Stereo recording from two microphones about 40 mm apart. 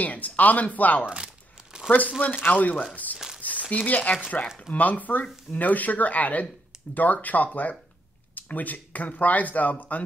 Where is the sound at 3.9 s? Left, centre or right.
Left.